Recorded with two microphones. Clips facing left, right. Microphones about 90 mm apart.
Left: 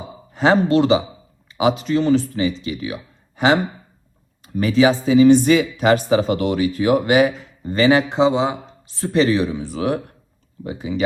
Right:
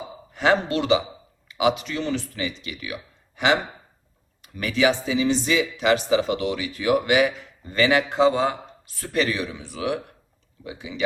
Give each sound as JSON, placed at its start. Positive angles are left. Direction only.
{"t": 0.3, "sound": "speech", "side_deg": 35}
{"t": 8.2, "sound": "speech", "side_deg": 20}